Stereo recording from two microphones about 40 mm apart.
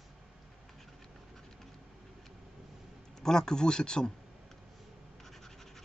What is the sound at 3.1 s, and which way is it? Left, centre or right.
Speech, centre.